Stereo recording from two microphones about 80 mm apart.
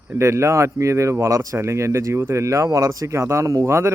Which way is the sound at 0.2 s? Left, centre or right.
Right.